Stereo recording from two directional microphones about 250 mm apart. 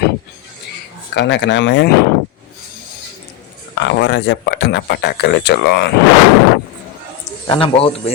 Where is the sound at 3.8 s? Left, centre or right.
Left.